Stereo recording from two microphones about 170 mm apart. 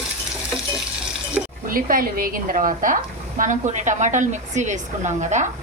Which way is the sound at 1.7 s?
55° right (ahead or behind).